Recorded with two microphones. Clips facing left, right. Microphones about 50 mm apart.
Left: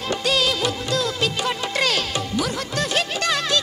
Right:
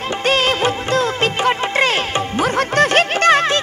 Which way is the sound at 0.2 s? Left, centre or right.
Right.